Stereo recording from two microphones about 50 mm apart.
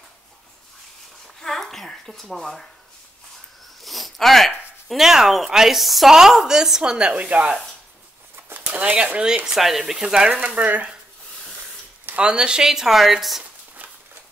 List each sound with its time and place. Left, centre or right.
1.4 s a sound: centre
3.8 s a sound: centre
4.5 s speech: centre; by 7.5 s right
8.5 s a sound: right
8.8 s speech: right
9.5 s speech: centre
10.0 s speech: centre
10.3 s speech: right
12.2 s speech: centre